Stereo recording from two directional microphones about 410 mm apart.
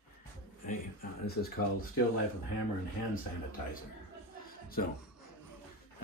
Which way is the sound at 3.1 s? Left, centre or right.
Left.